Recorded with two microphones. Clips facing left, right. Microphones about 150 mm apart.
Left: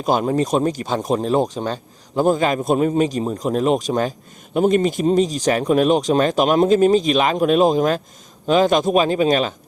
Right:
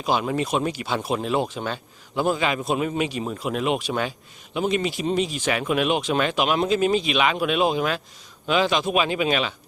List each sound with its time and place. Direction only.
0.0 s speech: 45° left (ahead or behind)